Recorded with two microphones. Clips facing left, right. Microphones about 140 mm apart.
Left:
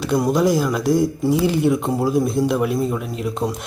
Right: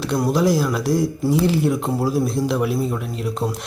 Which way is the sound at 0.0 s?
Centre (ahead or behind).